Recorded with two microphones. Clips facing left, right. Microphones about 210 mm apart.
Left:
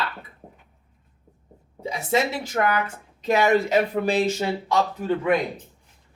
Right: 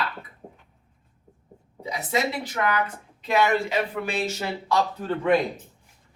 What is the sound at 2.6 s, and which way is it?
A woman's voice, 40° left (ahead or behind).